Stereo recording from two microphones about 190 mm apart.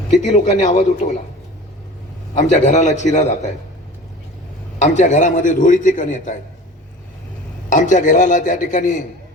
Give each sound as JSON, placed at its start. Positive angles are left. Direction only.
{"t": 0.1, "sound": "a man's voice", "side_deg": 40}
{"t": 2.4, "sound": "a man's voice", "side_deg": 35}
{"t": 4.8, "sound": "a man's voice", "side_deg": 40}
{"t": 7.7, "sound": "a man's voice", "side_deg": 40}